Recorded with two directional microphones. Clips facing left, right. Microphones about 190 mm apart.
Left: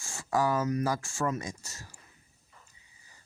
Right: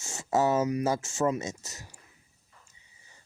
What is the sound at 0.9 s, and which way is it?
Speech, 25° right (ahead or behind).